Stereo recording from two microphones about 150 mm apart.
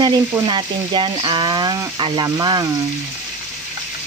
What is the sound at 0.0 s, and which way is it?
Speech, 30° right (ahead or behind).